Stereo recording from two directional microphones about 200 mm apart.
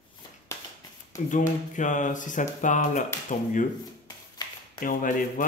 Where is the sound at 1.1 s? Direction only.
40° left (ahead or behind).